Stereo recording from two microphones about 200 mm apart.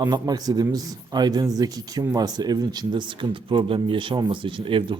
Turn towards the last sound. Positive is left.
turn(degrees=-25)  # may be behind; listen again after turning